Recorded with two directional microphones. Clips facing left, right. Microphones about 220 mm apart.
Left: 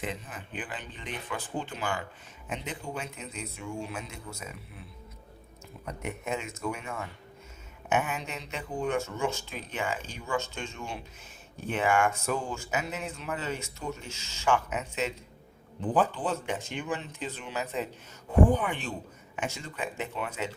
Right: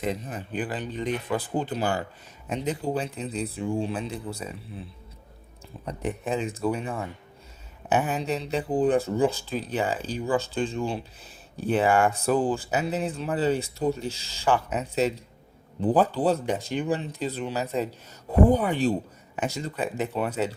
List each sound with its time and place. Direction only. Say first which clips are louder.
0.0 s speech: right 7 dB; 40° right (ahead or behind)